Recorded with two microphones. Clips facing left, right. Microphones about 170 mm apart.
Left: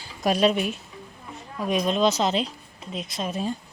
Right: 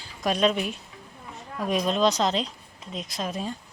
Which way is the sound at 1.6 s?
Centre (ahead or behind).